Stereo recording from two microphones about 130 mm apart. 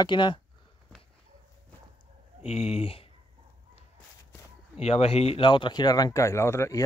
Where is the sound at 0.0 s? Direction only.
35° left (ahead or behind).